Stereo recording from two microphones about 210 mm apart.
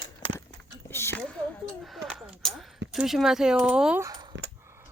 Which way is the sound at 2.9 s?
Centre (ahead or behind).